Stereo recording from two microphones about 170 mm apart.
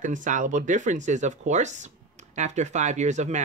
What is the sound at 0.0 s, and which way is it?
Speech, 50° right (ahead or behind).